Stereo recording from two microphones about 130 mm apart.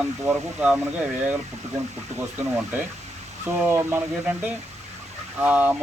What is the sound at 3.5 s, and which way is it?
Speech, 15° right (ahead or behind).